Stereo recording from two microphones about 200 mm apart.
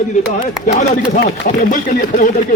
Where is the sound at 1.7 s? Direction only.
40° left (ahead or behind).